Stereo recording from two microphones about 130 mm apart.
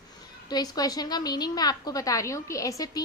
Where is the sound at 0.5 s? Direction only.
30° left (ahead or behind).